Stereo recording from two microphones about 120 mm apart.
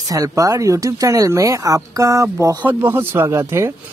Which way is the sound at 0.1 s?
30° right (ahead or behind).